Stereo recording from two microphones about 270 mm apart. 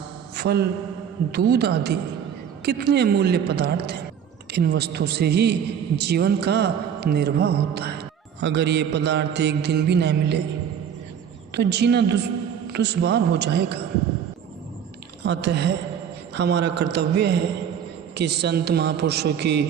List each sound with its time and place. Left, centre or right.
0.3 s mantra: right
1.3 s speech: right
11.5 s speech: right
15.2 s speech: right